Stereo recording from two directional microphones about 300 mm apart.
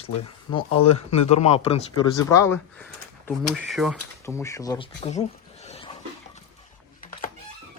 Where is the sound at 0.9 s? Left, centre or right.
Left.